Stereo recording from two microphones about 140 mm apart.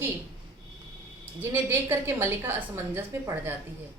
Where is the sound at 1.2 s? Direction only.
15° right (ahead or behind).